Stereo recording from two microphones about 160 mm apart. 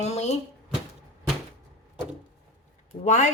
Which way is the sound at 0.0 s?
45° left (ahead or behind).